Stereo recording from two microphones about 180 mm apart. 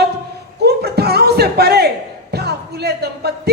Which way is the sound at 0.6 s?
60° right (ahead or behind).